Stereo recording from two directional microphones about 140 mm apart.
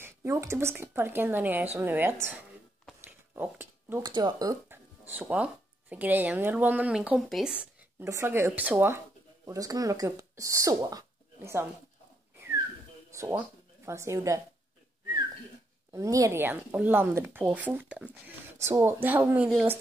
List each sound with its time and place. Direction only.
0.0 s a woman's voice: 20° right (ahead or behind)
3.1 s a sound: 15° right (ahead or behind)
4.0 s speech: 30° right (ahead or behind)
4.6 s speech: 15° right (ahead or behind)
8.0 s a woman's voice: 20° right (ahead or behind)
13.1 s speech: 20° right (ahead or behind)
15.9 s a woman's voice: 25° right (ahead or behind)